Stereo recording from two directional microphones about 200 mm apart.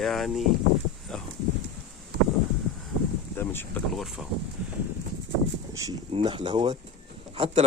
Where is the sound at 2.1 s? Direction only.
55° right (ahead or behind).